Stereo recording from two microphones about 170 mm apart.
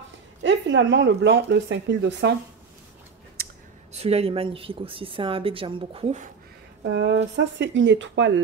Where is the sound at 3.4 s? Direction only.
65° right (ahead or behind).